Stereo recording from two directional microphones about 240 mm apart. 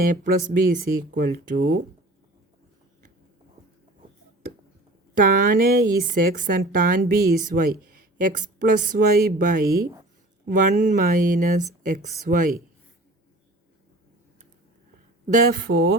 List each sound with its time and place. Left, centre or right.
0.0 s speech: right
5.1 s speech: right
15.3 s speech: right